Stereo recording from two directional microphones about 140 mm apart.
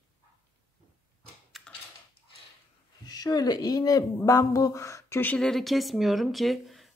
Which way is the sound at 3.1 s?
30° left (ahead or behind).